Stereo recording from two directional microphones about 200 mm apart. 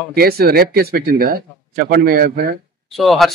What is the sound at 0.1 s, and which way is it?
Speech, 50° right (ahead or behind).